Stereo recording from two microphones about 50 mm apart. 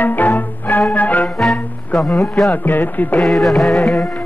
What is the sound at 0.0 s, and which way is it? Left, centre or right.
Music, left.